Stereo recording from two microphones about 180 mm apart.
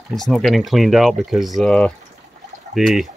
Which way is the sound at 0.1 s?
Centre (ahead or behind).